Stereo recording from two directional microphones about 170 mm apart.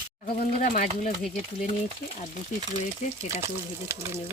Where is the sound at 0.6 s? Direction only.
50° left (ahead or behind).